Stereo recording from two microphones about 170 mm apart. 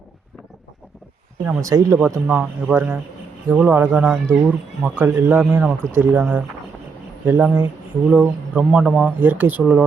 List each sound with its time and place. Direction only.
1.5 s speech: 15° right (ahead or behind)
2.0 s speech: 5° right (ahead or behind)